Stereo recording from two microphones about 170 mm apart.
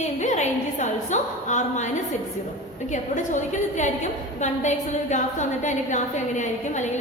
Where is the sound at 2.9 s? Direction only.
45° left (ahead or behind).